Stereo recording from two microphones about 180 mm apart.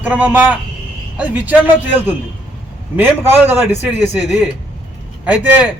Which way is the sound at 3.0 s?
10° right (ahead or behind).